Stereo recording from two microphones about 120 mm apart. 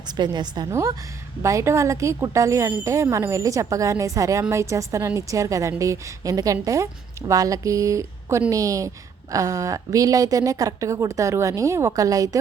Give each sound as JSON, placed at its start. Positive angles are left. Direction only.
{"t": 0.2, "sound": "a woman's voice", "side_deg": -40}
{"t": 0.7, "sound": "a woman's voice", "side_deg": -25}